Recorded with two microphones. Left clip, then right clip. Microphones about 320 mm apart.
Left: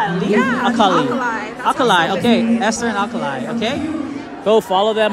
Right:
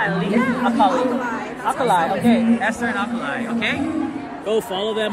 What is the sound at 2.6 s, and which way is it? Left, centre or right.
Speech, centre.